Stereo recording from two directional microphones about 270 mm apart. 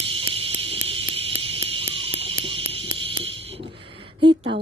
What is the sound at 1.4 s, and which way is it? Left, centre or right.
Insect, right.